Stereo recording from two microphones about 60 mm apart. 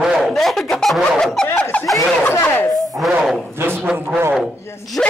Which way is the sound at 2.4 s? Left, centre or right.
Left.